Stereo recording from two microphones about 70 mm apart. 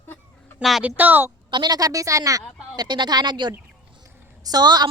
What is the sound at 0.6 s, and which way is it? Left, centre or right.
Speech, centre.